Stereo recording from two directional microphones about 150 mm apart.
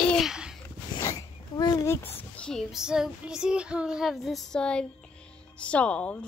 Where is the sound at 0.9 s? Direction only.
25° left (ahead or behind).